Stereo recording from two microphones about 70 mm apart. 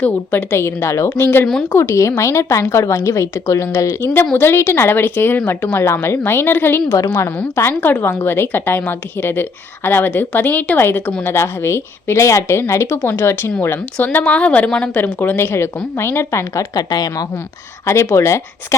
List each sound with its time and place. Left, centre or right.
0.0 s speech: left
0.5 s a woman's voice: left
4.0 s a woman's voice: left
13.0 s a woman's voice: left; by 15.0 s centre
15.0 s a woman's voice: left
16.7 s a woman's voice: left
17.8 s a woman's voice: left